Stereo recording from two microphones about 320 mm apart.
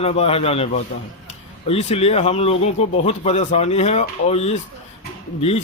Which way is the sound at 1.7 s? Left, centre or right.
Centre.